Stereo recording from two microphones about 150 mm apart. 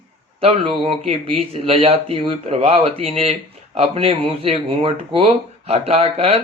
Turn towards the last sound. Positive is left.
turn(degrees=-40)  # may be behind; listen again after turning